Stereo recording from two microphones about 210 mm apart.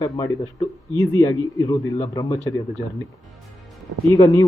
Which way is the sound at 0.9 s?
15° left (ahead or behind).